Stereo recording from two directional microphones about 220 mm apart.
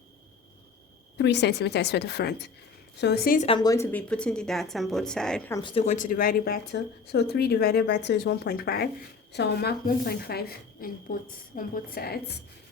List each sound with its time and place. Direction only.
1.1 s speech: 50° left (ahead or behind)
3.4 s speech: 20° left (ahead or behind); by 5.5 s 5° left (ahead or behind)
5.5 s speech: 25° left (ahead or behind); by 12.2 s 45° left (ahead or behind)